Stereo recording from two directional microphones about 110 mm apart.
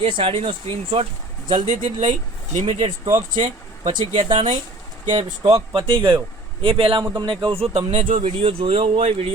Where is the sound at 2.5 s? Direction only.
90° right.